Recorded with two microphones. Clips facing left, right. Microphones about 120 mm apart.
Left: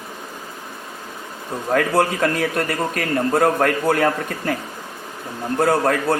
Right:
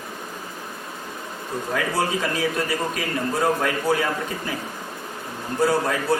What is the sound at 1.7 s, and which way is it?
A man's voice, 55° left (ahead or behind).